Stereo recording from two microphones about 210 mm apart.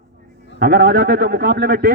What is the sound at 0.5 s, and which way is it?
A man's voice, 45° right (ahead or behind).